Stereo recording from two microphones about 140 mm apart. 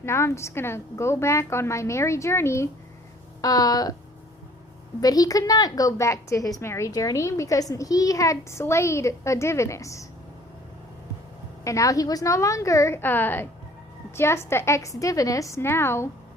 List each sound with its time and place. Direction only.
0.0 s a woman's voice: 20° left (ahead or behind)
4.9 s a woman's voice: 25° left (ahead or behind)
11.6 s a woman's voice: 25° left (ahead or behind)